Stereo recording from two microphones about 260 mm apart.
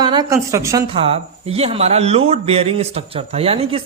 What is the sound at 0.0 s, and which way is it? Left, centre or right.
A woman's voice, centre.